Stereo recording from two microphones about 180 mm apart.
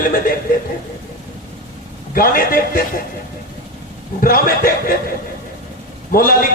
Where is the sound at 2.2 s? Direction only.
50° left (ahead or behind).